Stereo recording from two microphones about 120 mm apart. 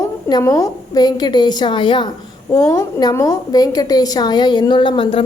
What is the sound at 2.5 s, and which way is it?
A woman's voice, 30° left (ahead or behind).